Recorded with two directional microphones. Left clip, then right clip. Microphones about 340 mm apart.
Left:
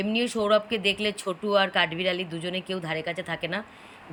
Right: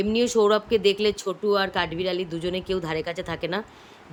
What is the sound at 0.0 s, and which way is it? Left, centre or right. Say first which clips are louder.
Speech: right 6 dB; centre.